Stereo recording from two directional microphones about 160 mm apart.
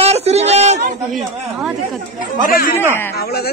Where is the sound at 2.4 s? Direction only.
65° left (ahead or behind).